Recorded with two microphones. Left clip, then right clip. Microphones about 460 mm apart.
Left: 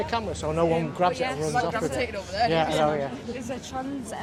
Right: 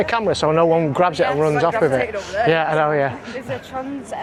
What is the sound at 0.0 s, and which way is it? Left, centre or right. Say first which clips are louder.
Speech: right 10 dB; right.